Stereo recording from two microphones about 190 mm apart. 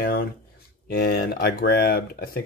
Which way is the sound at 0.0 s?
55° left (ahead or behind).